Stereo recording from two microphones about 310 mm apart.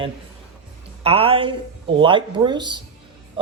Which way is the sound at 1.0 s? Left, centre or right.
Centre.